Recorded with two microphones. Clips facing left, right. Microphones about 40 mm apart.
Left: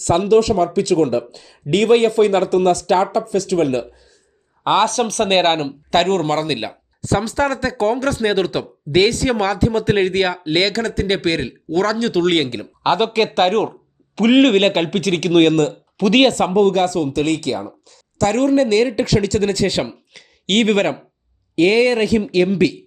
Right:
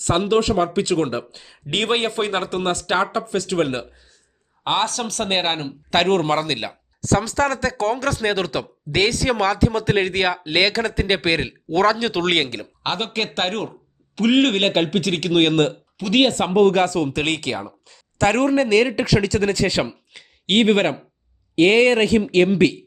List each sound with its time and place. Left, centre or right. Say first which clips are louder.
0.0 s speech: left 4 dB; right
4.9 s speech: left 6 dB; left
5.4 s speech: left 7 dB; left
5.9 s speech: left 1 dB; centre
6.5 s speech: left 3 dB; centre
15.4 s speech: left 3 dB; centre
16.0 s speech: left 4 dB; centre
16.3 s speech: left 4 dB; right
17.1 s speech: left 4 dB; right
20.1 s speech: left 1 dB; centre
21.5 s speech: even; right